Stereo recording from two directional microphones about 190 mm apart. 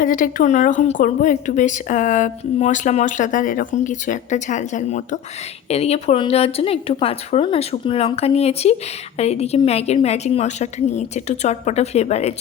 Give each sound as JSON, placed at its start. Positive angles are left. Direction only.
{"t": 0.0, "sound": "a woman's voice", "side_deg": 45}